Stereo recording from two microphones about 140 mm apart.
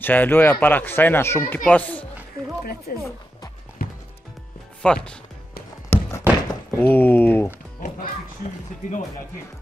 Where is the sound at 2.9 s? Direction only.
90° left.